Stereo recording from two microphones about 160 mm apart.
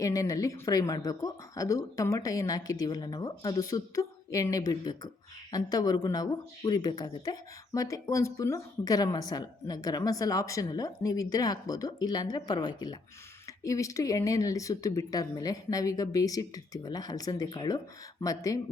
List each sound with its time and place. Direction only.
0.0 s speech: 20° left (ahead or behind)